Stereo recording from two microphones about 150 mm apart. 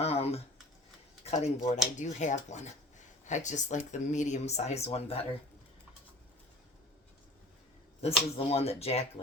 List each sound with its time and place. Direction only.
0.0 s typing: 45° left (ahead or behind)
1.2 s speech: 50° left (ahead or behind)
8.0 s speech: 40° left (ahead or behind)